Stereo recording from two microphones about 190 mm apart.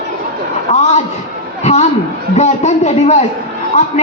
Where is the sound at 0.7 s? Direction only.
40° left (ahead or behind).